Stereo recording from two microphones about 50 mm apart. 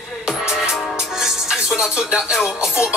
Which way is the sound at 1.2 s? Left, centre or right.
Centre.